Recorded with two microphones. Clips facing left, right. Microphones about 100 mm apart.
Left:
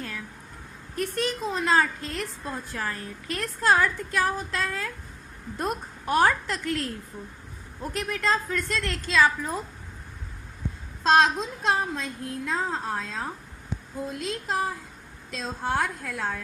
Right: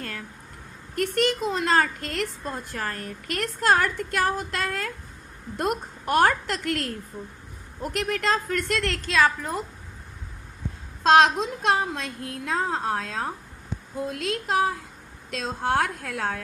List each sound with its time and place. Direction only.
0.0 s a sound: 60° right (ahead or behind)
0.9 s a woman's voice: 75° right (ahead or behind)
2.5 s a woman's voice: 55° right (ahead or behind)
7.9 s a woman's voice: 65° right (ahead or behind)
11.0 s a woman's voice: 65° right (ahead or behind)